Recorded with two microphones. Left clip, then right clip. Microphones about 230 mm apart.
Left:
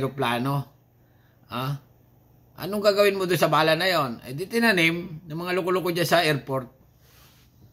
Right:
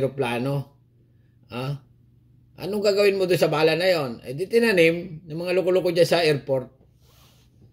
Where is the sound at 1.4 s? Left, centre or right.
Centre.